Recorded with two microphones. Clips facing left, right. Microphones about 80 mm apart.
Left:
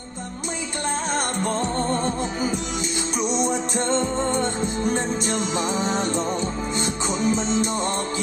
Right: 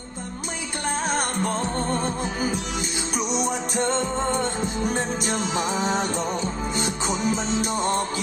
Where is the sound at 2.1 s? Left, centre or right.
Left.